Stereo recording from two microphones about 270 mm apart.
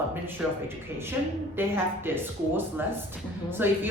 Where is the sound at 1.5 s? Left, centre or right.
Centre.